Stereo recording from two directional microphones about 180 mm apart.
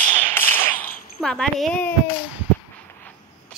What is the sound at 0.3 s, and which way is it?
Tap, 10° left (ahead or behind).